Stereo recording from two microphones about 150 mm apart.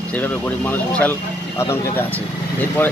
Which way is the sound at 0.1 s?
10° left (ahead or behind).